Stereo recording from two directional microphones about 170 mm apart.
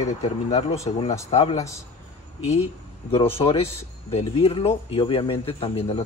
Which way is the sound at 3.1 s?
35° left (ahead or behind).